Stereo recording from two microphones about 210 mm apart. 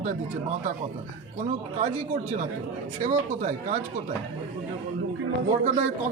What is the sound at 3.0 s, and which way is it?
Speech, 35° right (ahead or behind).